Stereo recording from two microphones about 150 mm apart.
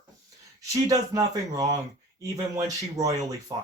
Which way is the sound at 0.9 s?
25° right (ahead or behind).